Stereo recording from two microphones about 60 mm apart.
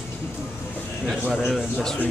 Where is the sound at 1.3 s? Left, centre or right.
Centre.